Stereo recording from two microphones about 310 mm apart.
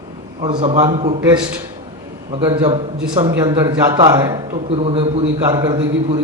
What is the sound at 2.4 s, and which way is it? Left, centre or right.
Speech, centre.